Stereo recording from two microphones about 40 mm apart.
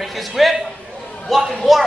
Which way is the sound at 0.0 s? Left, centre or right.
Centre.